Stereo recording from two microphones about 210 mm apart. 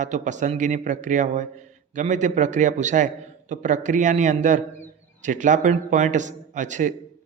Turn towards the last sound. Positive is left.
turn(degrees=-35)  # may be behind; listen again after turning